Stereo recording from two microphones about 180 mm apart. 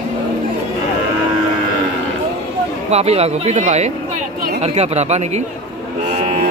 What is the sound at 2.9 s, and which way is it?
Speech, 35° right (ahead or behind).